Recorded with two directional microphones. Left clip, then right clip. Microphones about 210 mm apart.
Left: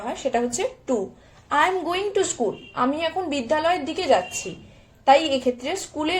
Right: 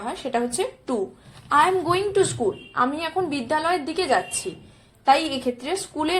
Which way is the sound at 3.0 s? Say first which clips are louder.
Left 1 dB; 55° right (ahead or behind).